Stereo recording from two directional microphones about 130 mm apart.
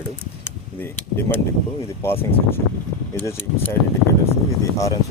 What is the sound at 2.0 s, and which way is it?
Speech, 20° left (ahead or behind).